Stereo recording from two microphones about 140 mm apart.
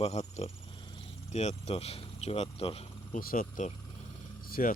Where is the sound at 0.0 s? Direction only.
50° left (ahead or behind).